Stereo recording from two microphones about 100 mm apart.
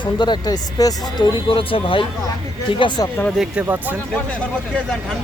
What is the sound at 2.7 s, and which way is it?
Speech, 50° left (ahead or behind).